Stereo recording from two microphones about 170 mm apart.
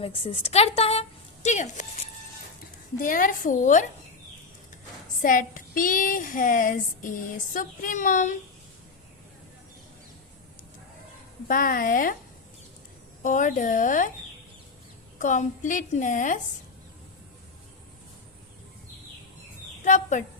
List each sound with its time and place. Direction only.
0.0 s a woman's voice: 35° left (ahead or behind)
5.2 s speech: 55° left (ahead or behind)
11.4 s a woman's voice: 55° left (ahead or behind)
13.2 s speech: 50° left (ahead or behind)
15.2 s speech: 50° left (ahead or behind)
19.8 s a woman's voice: 45° left (ahead or behind)